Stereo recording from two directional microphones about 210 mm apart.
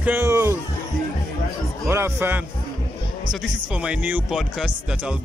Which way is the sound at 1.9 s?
10° right (ahead or behind).